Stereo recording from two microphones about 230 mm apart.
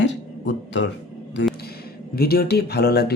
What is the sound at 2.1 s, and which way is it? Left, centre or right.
Speech, left.